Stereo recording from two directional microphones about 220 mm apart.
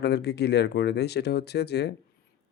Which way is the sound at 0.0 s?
50° left (ahead or behind).